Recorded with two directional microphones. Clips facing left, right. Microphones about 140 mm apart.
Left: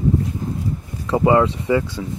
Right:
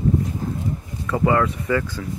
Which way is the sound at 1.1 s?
20° left (ahead or behind).